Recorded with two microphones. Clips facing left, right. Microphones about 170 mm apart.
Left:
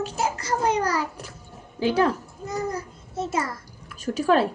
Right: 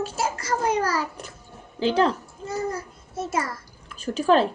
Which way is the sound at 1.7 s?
10° left (ahead or behind).